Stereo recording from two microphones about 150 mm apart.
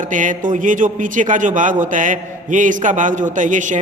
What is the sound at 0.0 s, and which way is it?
A man's voice, 60° right (ahead or behind).